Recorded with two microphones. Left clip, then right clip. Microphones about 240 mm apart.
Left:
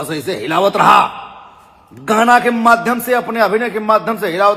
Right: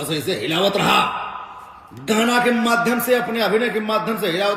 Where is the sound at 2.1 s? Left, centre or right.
Centre.